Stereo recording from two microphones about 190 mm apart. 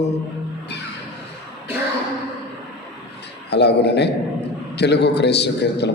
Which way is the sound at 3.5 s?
60° left (ahead or behind).